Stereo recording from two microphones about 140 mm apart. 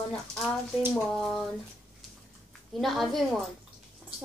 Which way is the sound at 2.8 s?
Centre (ahead or behind).